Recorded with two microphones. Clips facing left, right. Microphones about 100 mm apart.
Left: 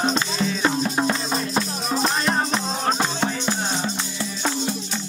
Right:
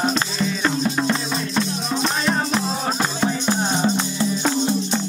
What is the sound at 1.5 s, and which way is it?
Music, 5° left (ahead or behind).